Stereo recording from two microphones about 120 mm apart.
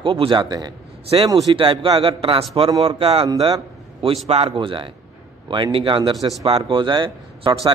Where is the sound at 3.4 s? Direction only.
45° right (ahead or behind).